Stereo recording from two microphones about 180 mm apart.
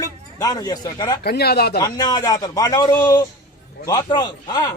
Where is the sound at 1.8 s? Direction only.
20° left (ahead or behind).